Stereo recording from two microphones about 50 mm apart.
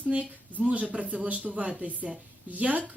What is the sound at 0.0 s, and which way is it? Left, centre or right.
A woman's voice, right.